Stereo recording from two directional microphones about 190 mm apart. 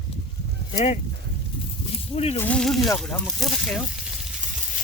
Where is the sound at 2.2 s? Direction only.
35° left (ahead or behind).